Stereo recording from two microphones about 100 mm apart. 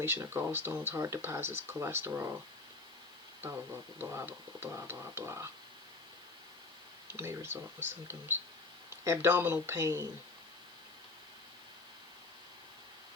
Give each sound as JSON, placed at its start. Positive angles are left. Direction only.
{"t": 0.0, "sound": "speech", "side_deg": -25}
{"t": 3.9, "sound": "speech", "side_deg": -25}
{"t": 7.1, "sound": "speech", "side_deg": -25}